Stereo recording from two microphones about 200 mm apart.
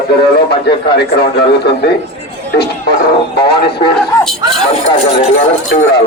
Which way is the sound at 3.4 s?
55° left (ahead or behind).